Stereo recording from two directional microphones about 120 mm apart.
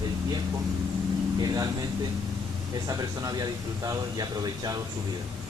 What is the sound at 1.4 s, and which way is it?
Speech, 30° right (ahead or behind).